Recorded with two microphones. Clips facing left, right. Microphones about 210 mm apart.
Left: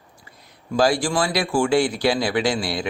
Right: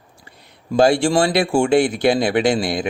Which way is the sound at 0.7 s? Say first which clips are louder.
Right 5 dB; 25° right (ahead or behind).